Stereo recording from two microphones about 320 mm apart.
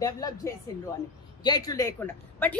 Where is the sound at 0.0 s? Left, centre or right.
Centre.